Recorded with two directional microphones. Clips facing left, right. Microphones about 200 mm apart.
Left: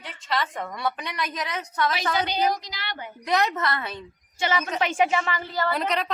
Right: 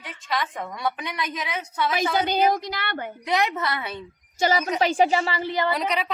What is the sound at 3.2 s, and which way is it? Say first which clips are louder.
Speech: left 1 dB; 10° right (ahead or behind).